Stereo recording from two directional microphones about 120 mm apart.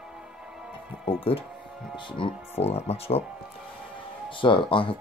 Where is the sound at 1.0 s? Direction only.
50° left (ahead or behind).